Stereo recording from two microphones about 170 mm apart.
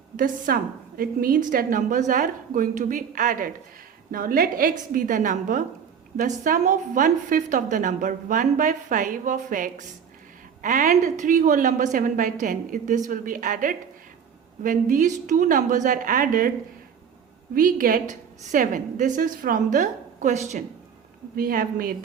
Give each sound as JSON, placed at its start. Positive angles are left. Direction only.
{"t": 0.2, "sound": "a woman's voice", "side_deg": -60}
{"t": 17.5, "sound": "a woman's voice", "side_deg": -55}
{"t": 21.3, "sound": "a woman's voice", "side_deg": -60}